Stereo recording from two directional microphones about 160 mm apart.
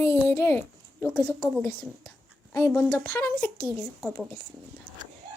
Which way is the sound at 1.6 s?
15° left (ahead or behind).